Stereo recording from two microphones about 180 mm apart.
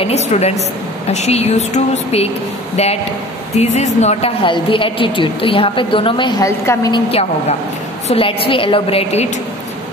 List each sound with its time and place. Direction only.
0.0 s a woman's voice: 35° left (ahead or behind); by 7.0 s 15° left (ahead or behind)
7.1 s a woman's voice: 35° left (ahead or behind)